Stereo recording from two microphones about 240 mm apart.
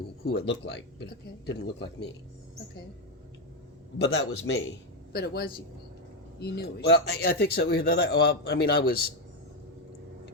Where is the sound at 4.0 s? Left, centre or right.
Left.